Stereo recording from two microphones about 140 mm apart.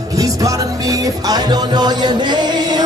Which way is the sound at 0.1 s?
25° right (ahead or behind).